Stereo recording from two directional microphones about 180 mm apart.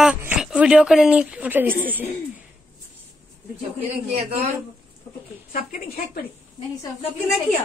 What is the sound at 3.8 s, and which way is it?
Speech, 35° right (ahead or behind).